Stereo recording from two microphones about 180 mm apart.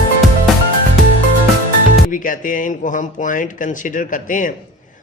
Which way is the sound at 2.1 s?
50° left (ahead or behind).